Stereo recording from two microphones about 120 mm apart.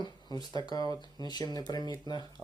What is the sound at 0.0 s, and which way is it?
Speech, 35° left (ahead or behind).